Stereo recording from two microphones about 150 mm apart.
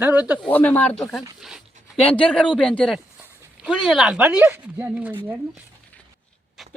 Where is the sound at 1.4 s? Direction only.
Centre (ahead or behind).